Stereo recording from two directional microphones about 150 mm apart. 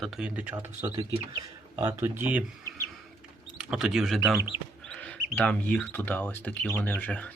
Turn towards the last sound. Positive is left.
turn(degrees=10)  # may be behind; listen again after turning